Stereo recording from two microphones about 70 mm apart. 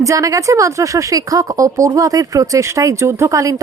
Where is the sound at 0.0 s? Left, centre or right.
Right.